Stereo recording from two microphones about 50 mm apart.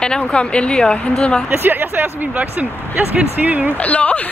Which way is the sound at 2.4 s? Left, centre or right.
Right.